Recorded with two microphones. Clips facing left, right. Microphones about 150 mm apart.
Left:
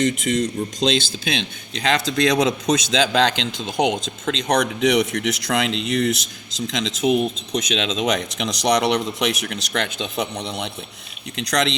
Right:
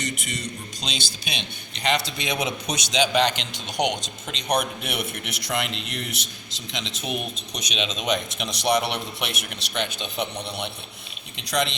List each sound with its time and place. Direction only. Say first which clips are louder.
0.0 s speech: left 12 dB; 90° left